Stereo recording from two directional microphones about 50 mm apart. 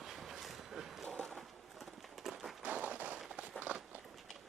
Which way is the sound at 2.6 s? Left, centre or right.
Right.